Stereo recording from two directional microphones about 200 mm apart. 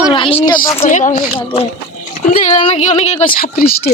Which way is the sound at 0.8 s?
35° left (ahead or behind).